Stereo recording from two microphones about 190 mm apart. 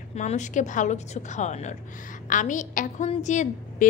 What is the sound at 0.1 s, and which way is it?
A woman's voice, 40° left (ahead or behind).